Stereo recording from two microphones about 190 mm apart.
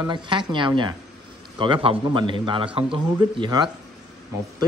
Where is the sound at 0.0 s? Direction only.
25° right (ahead or behind).